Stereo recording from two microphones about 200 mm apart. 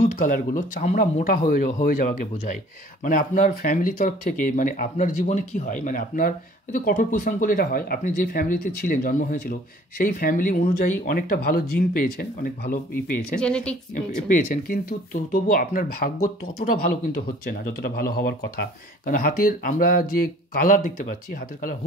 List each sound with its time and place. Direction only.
0.0 s speech: 45° left (ahead or behind)
13.4 s speech: 5° left (ahead or behind)
14.2 s speech: 45° left (ahead or behind)